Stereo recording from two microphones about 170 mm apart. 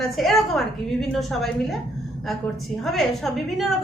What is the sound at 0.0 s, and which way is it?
A woman's voice, centre (ahead or behind).